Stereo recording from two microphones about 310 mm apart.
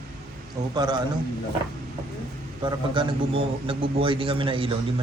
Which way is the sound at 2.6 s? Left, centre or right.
Centre.